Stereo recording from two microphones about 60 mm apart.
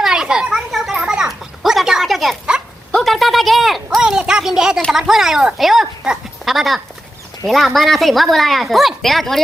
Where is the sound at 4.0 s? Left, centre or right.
Centre.